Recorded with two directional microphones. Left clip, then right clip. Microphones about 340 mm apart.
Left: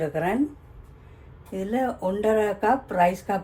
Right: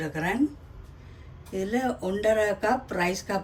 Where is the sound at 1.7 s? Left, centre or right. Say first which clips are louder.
Left 4 dB; centre.